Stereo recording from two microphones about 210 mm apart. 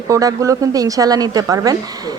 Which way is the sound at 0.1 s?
15° right (ahead or behind).